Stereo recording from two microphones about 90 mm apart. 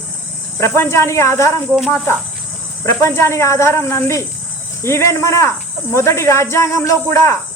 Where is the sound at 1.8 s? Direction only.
20° left (ahead or behind).